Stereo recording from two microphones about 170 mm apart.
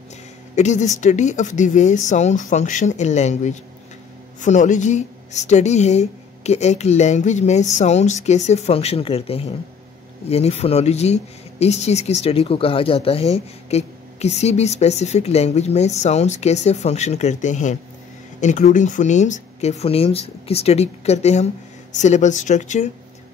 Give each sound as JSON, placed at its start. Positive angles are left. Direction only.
{"t": 0.6, "sound": "speech", "side_deg": 45}